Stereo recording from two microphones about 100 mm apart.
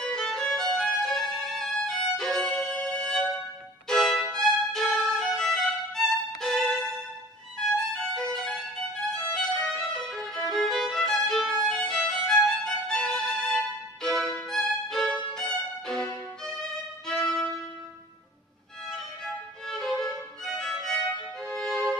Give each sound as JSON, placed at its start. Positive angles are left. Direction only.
{"t": 0.0, "sound": "violin", "side_deg": 5}
{"t": 8.1, "sound": "violin", "side_deg": 5}
{"t": 11.6, "sound": "music", "side_deg": 5}
{"t": 14.0, "sound": "violin", "side_deg": 5}
{"t": 18.9, "sound": "violin", "side_deg": 5}
{"t": 21.5, "sound": "music", "side_deg": 5}